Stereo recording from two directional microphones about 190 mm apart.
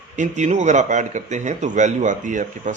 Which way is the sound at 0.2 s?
40° right (ahead or behind).